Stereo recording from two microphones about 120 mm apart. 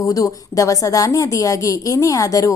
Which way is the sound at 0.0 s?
30° left (ahead or behind).